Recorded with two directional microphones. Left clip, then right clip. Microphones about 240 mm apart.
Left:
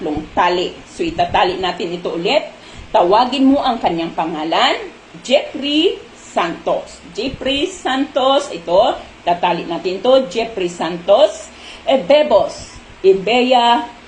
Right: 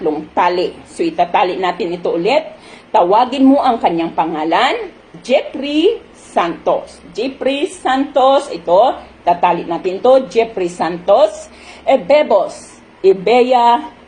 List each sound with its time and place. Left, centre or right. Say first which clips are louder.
0.0 s speech: right 2 dB; right